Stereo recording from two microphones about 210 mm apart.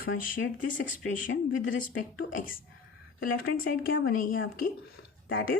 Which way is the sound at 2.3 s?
40° left (ahead or behind).